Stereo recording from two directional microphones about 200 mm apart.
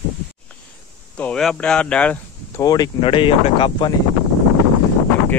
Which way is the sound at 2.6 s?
20° left (ahead or behind).